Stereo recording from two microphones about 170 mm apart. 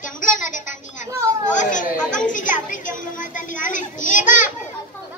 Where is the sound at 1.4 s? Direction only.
45° left (ahead or behind).